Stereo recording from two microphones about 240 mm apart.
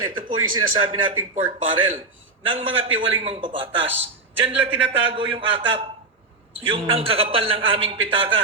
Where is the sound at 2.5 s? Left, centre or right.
Right.